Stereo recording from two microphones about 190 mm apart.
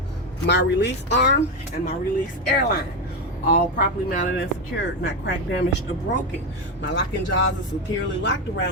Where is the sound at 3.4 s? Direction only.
50° left (ahead or behind).